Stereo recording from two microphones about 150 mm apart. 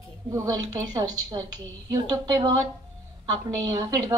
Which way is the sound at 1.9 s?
25° right (ahead or behind).